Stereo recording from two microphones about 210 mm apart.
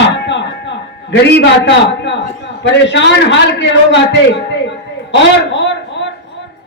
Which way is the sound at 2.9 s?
60° left (ahead or behind).